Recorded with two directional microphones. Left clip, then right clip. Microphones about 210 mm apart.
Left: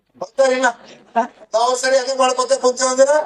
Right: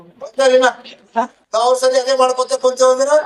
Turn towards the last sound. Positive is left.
turn(degrees=-25)  # may be behind; listen again after turning